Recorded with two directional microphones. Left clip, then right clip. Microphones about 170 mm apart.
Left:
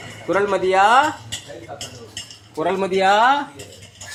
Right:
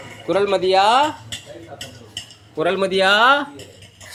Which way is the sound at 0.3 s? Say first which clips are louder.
Right 1 dB; 20° right (ahead or behind).